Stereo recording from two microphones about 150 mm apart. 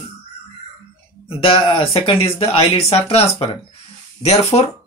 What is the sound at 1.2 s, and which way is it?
Speech, 35° left (ahead or behind).